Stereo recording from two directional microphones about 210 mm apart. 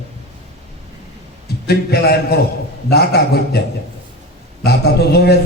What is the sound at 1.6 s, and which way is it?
A man's voice, 50° left (ahead or behind).